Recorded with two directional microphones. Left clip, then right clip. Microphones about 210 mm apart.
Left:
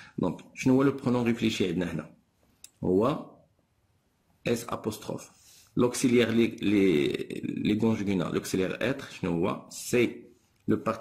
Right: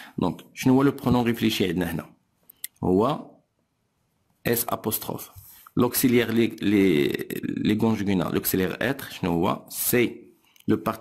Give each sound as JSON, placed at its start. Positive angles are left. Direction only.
{"t": 0.2, "sound": "speech", "side_deg": -45}
{"t": 4.5, "sound": "speech", "side_deg": -50}